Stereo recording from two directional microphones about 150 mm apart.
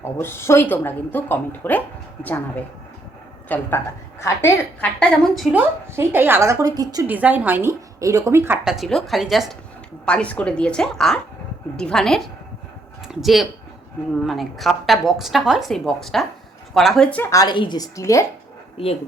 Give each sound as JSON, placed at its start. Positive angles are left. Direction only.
{"t": 0.0, "sound": "speech", "side_deg": 15}
{"t": 5.5, "sound": "speech", "side_deg": -15}
{"t": 7.1, "sound": "a woman's voice", "side_deg": -10}
{"t": 8.6, "sound": "a woman's voice", "side_deg": 0}
{"t": 17.3, "sound": "a woman's voice", "side_deg": 30}